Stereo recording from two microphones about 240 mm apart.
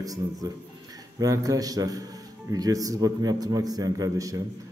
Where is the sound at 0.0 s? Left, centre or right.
Centre.